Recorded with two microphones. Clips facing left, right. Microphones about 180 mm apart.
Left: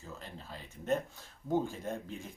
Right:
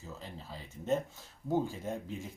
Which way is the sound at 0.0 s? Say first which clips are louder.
Right 1 dB; 10° right (ahead or behind).